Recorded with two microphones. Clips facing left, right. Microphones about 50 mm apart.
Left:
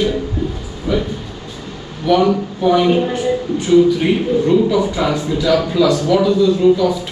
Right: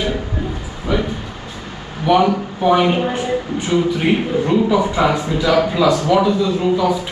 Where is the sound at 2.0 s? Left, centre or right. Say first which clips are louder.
Left 1 dB; centre.